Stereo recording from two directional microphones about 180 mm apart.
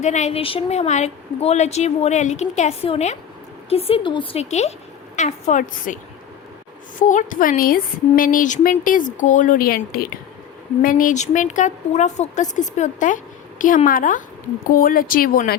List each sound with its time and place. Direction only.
0.0 s a woman's voice: 40° left (ahead or behind)
7.0 s a woman's voice: 45° left (ahead or behind)